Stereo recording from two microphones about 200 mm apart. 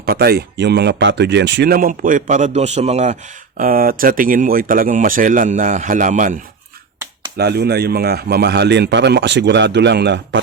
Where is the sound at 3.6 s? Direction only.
45° right (ahead or behind).